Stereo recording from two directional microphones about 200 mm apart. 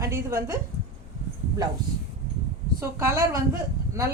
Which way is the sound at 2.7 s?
15° right (ahead or behind).